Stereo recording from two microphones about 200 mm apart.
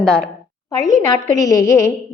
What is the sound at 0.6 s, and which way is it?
A woman's voice, 20° left (ahead or behind).